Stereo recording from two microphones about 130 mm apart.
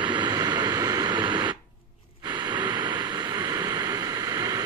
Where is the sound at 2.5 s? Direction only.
35° right (ahead or behind).